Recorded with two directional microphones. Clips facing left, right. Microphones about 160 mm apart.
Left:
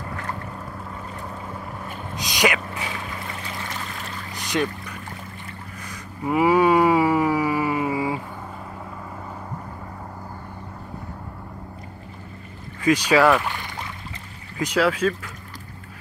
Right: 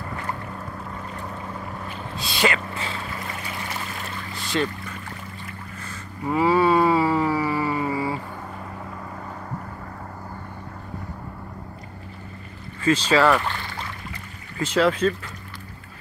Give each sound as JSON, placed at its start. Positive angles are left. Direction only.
{"t": 2.1, "sound": "speech", "side_deg": 15}
{"t": 4.3, "sound": "boat", "side_deg": 15}
{"t": 5.9, "sound": "a sound", "side_deg": 15}
{"t": 12.8, "sound": "speech", "side_deg": 15}